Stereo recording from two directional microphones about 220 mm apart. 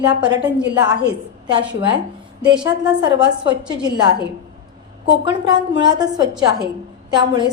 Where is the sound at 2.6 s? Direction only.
20° right (ahead or behind).